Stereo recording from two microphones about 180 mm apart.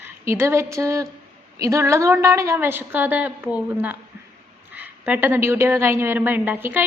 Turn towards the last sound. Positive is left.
turn(degrees=-10)  # may be behind; listen again after turning